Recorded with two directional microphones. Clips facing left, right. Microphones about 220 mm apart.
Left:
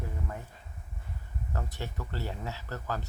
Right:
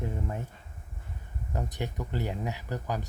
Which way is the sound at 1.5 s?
15° right (ahead or behind).